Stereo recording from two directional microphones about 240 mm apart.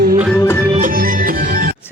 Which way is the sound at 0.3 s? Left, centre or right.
Centre.